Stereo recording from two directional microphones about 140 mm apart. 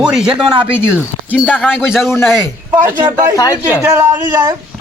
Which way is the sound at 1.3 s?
10° left (ahead or behind).